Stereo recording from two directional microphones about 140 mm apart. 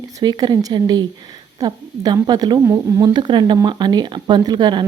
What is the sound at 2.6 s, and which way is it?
Speech, 20° right (ahead or behind).